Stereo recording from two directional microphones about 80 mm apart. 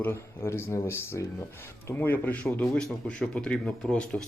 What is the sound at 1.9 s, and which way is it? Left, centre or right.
Speech, left.